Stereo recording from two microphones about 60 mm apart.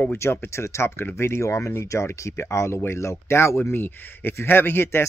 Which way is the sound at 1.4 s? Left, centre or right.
Left.